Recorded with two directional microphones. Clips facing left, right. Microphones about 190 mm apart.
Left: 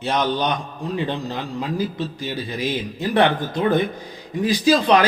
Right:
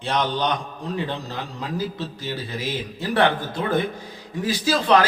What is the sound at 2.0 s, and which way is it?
Speech, 15° left (ahead or behind).